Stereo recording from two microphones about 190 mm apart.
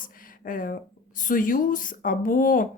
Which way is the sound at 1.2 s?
45° left (ahead or behind).